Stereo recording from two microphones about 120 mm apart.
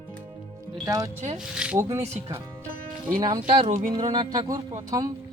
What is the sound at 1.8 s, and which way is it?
Speech, 65° right (ahead or behind).